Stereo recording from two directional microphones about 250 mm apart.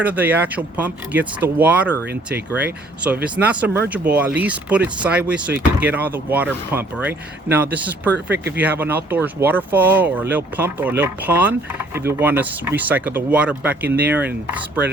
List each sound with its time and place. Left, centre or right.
0.0 s speech: centre